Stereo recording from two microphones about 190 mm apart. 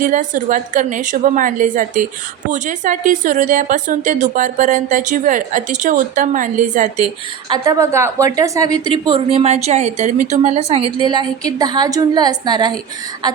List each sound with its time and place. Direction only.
0.0 s a woman's voice: 45° right (ahead or behind)
7.5 s a woman's voice: 20° right (ahead or behind)